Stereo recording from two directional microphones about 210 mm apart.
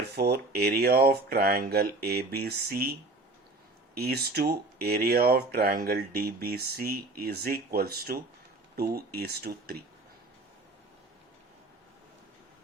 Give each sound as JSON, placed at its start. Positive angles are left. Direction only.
{"t": 0.0, "sound": "speech", "side_deg": -50}
{"t": 3.9, "sound": "speech", "side_deg": -50}